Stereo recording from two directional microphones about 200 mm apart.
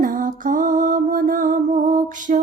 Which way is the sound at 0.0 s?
40° right (ahead or behind).